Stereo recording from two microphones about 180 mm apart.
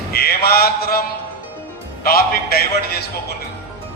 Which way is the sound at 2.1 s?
55° left (ahead or behind).